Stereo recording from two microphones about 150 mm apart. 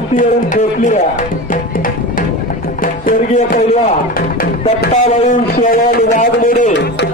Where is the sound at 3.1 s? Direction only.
70° left (ahead or behind).